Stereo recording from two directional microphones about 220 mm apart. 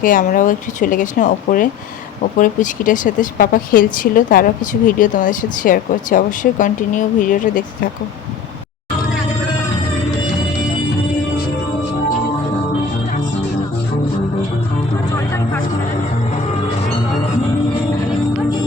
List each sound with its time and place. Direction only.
0.0 s speech: 35° left (ahead or behind)